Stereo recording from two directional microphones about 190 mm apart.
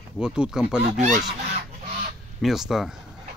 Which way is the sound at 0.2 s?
5° right (ahead or behind).